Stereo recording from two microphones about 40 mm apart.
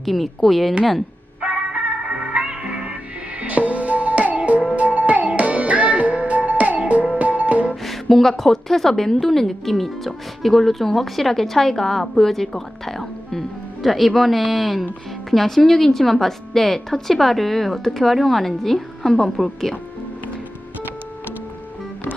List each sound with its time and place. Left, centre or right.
0.0 s speech: centre
1.5 s music: right
7.9 s speech: centre